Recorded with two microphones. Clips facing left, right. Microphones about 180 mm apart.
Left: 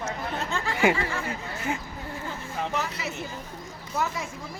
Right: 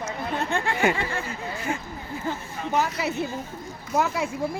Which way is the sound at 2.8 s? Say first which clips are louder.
Right 6 dB; 65° right (ahead or behind).